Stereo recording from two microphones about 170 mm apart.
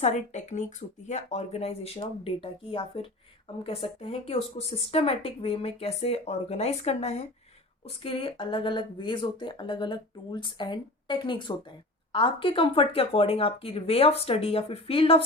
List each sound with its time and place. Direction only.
0.0 s speech: 45° left (ahead or behind)